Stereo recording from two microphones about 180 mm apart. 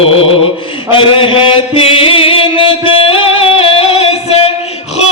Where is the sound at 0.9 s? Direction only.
30° left (ahead or behind).